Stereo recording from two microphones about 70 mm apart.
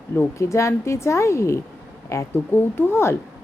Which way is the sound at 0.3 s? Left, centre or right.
Left.